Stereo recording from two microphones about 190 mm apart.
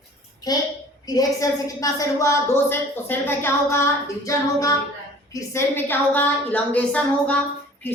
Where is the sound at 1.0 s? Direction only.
20° left (ahead or behind).